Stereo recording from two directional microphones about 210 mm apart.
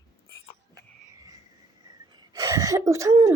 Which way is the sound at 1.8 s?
20° right (ahead or behind).